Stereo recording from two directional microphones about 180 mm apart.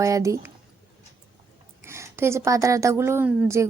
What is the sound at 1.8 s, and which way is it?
A woman's voice, 15° right (ahead or behind).